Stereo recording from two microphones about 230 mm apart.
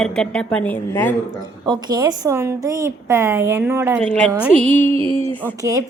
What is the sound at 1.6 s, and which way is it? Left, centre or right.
A woman's voice, centre.